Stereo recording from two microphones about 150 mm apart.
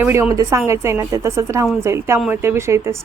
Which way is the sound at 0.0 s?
20° right (ahead or behind).